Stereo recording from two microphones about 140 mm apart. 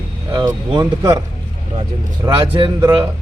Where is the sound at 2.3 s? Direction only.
40° right (ahead or behind).